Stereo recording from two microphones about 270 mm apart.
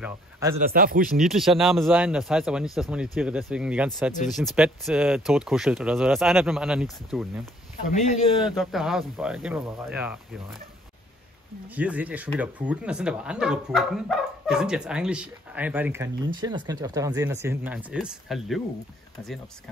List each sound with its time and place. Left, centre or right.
0.0 s speech: centre
0.6 s speech: right
1.1 s speech: centre
7.9 s speech: left
8.5 s speech: centre
11.7 s speech: centre